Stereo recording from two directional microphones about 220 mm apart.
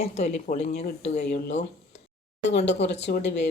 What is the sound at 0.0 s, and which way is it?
Speech, 30° left (ahead or behind).